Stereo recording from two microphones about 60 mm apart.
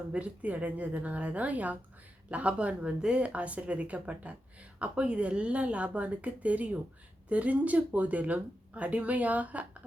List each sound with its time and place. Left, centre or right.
0.1 s speech: right